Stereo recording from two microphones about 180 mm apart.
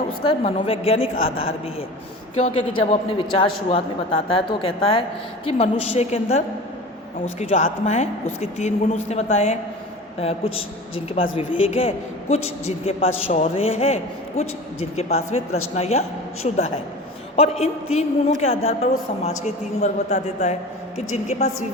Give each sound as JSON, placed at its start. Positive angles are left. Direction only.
{"t": 0.3, "sound": "a woman's voice", "side_deg": 30}
{"t": 2.3, "sound": "a woman's voice", "side_deg": 35}
{"t": 17.3, "sound": "a woman's voice", "side_deg": 35}